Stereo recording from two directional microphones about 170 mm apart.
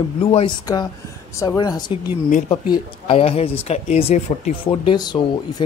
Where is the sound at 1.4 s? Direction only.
20° left (ahead or behind); by 4.8 s 40° left (ahead or behind).